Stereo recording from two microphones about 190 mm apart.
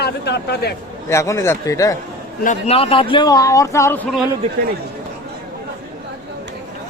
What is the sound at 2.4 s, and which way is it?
Speech, 35° left (ahead or behind).